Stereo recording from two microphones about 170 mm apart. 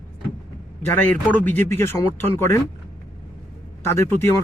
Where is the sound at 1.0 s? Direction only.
10° left (ahead or behind).